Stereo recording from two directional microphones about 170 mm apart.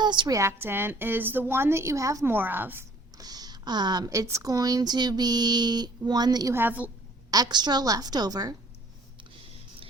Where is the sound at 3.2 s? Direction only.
25° right (ahead or behind).